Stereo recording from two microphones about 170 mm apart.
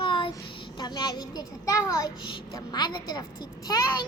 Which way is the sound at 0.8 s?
25° left (ahead or behind).